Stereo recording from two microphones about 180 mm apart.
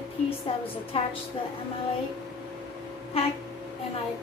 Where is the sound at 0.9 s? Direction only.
35° left (ahead or behind).